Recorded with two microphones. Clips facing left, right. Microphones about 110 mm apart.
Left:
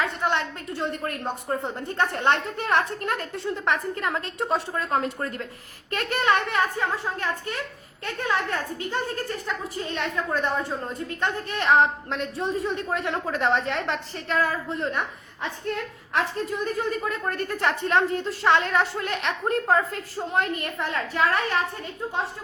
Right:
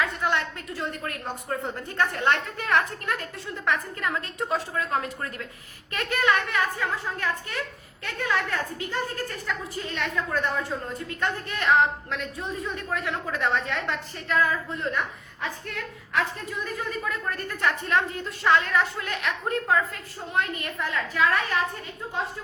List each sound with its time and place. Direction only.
0.0 s a woman's voice: 25° left (ahead or behind)
16.1 s a woman's voice: 30° left (ahead or behind)